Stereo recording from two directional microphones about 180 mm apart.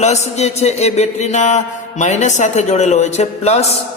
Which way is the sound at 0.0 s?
40° left (ahead or behind).